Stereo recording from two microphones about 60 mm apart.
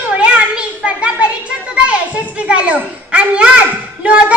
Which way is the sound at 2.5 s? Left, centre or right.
Centre.